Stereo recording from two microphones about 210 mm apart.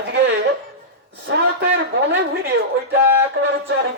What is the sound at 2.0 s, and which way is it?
Speech, 55° right (ahead or behind).